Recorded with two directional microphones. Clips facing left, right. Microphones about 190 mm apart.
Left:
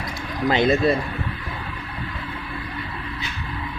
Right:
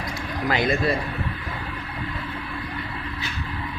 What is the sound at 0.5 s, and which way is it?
Speech, 25° left (ahead or behind).